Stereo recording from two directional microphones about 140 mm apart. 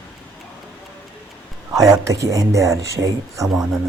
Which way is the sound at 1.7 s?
25° right (ahead or behind).